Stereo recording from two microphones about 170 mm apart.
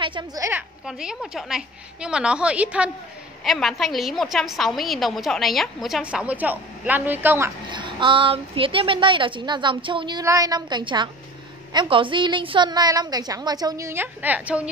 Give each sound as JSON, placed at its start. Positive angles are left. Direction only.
{"t": 0.0, "sound": "a woman's voice", "side_deg": -25}
{"t": 0.5, "sound": "a woman's voice", "side_deg": -5}
{"t": 7.7, "sound": "a woman's voice", "side_deg": -30}